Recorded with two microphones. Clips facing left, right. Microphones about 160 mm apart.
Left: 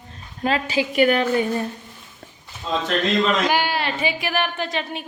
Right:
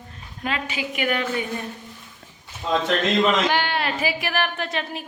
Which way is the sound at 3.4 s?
10° left (ahead or behind).